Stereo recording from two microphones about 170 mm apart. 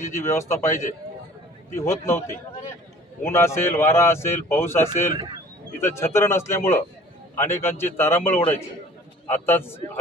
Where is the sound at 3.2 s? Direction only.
15° left (ahead or behind).